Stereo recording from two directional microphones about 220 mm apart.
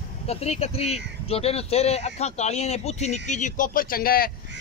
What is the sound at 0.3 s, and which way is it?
Speech, 30° left (ahead or behind).